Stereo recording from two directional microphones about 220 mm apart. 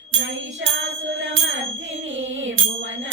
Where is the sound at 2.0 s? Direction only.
60° right (ahead or behind).